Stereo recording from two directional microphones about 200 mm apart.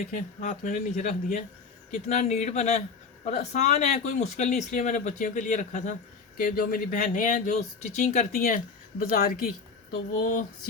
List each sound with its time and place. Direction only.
0.0 s speech: 40° left (ahead or behind)